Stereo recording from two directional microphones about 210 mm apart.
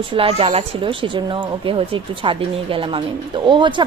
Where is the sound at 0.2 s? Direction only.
25° right (ahead or behind).